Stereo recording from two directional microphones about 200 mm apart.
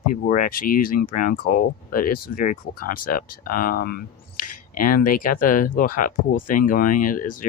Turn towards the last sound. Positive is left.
turn(degrees=40)  # may be behind; listen again after turning